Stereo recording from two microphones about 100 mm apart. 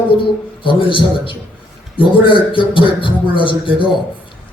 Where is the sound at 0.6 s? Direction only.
60° left (ahead or behind).